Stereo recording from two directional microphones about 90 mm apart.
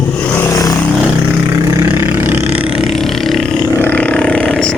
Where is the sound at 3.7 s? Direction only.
20° left (ahead or behind).